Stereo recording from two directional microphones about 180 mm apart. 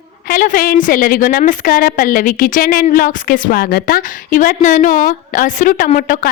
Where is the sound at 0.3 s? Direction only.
50° left (ahead or behind).